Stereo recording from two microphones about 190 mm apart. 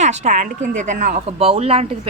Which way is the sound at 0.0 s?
40° right (ahead or behind).